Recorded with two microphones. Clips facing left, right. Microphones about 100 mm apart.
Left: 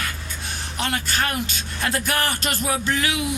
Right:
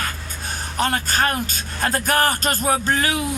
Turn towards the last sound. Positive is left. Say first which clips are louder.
# right 2 dB
turn(degrees=-40)  # may be behind; listen again after turning